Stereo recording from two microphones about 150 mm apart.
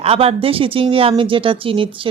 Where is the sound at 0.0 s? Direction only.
40° right (ahead or behind).